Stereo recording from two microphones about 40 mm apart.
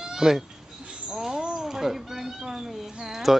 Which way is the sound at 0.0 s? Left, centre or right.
Centre.